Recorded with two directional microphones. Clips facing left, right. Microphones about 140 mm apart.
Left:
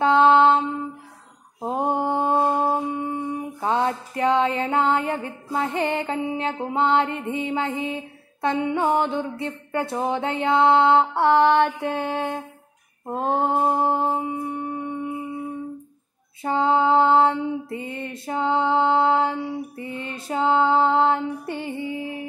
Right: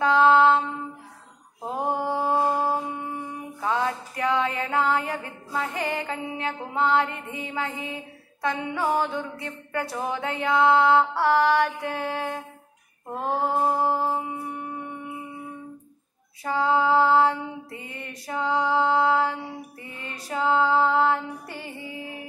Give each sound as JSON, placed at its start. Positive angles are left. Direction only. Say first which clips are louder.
{"t": 0.0, "sound": "a sound", "louder": "left 2 dB", "side_deg": 25}
{"t": 1.6, "sound": "mantra", "louder": "left 4 dB", "side_deg": 30}
{"t": 16.4, "sound": "female singing", "louder": "left 3 dB", "side_deg": 25}
{"t": 18.2, "sound": "music", "louder": "left 3 dB", "side_deg": 25}